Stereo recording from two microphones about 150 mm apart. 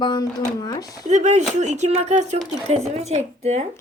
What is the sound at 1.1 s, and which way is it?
Speech, 50° right (ahead or behind).